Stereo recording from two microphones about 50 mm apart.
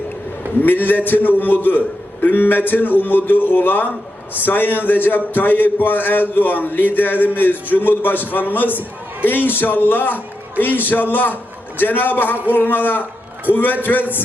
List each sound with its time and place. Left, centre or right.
0.6 s a man's voice: left